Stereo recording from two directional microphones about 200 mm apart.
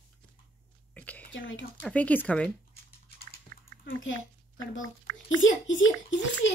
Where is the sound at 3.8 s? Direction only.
75° left (ahead or behind).